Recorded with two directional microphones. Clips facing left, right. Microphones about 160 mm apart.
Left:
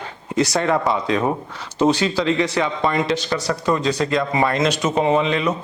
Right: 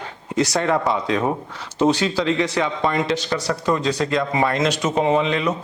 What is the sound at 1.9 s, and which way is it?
Speech, 5° left (ahead or behind).